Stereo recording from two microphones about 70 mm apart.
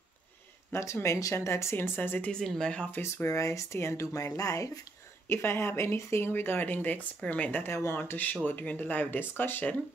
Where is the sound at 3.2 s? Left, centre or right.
Left.